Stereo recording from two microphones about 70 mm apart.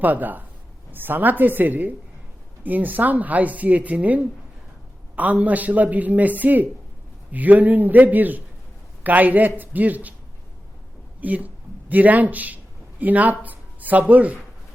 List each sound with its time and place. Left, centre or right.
0.0 s speech: right
11.2 s speech: right